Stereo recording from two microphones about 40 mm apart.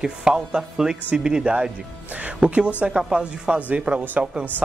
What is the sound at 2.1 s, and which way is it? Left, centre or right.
A woman's voice, right.